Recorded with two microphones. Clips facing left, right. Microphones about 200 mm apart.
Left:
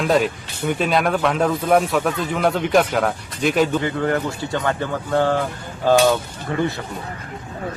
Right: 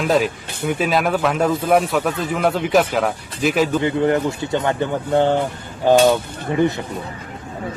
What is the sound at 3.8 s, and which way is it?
Speech, 20° right (ahead or behind).